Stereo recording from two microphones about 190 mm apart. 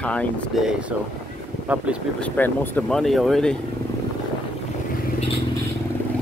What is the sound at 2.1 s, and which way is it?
Speech, 10° left (ahead or behind).